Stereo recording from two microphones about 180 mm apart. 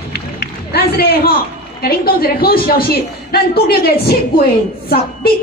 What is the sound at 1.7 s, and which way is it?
A man's voice, 55° left (ahead or behind).